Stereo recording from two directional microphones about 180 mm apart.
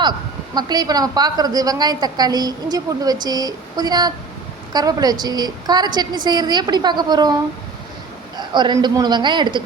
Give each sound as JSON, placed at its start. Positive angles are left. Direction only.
{"t": 0.5, "sound": "a woman's voice", "side_deg": -20}
{"t": 8.4, "sound": "a woman's voice", "side_deg": -25}